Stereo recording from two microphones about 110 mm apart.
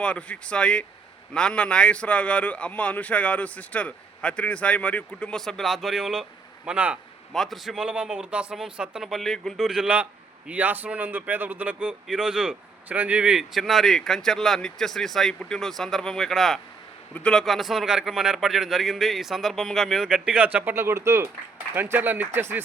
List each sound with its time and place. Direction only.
0.0 s a man's voice: 10° left (ahead or behind); by 7.0 s 10° right (ahead or behind)
7.3 s a man's voice: centre (ahead or behind); by 22.6 s 20° right (ahead or behind)